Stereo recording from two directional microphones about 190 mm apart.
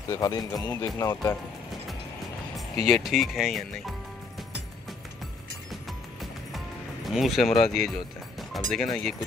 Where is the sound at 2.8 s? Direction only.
Centre (ahead or behind).